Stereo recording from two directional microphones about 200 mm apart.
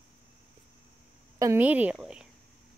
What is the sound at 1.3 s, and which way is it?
Speech, 10° right (ahead or behind).